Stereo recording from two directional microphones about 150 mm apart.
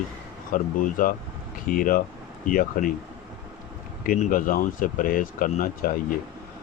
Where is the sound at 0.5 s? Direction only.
65° left (ahead or behind).